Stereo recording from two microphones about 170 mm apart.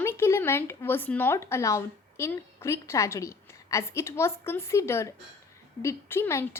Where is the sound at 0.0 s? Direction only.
15° left (ahead or behind).